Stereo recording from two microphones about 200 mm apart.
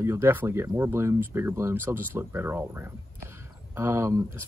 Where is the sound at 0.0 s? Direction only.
10° right (ahead or behind).